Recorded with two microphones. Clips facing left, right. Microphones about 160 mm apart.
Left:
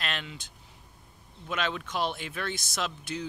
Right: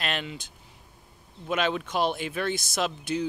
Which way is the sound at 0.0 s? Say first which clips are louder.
Right 4 dB; 10° right (ahead or behind).